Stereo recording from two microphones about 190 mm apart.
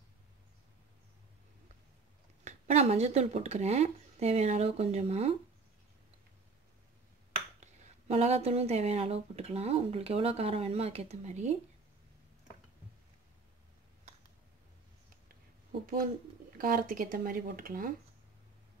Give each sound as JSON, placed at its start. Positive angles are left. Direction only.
{"t": 2.4, "sound": "speech", "side_deg": -35}
{"t": 7.6, "sound": "speech", "side_deg": -35}
{"t": 16.5, "sound": "speech", "side_deg": -45}